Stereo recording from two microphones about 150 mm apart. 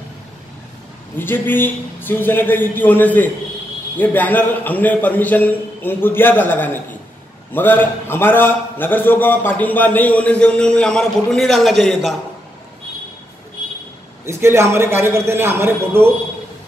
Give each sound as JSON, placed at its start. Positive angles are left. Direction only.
{"t": 1.1, "sound": "a man's voice", "side_deg": 15}
{"t": 14.2, "sound": "a man's voice", "side_deg": -20}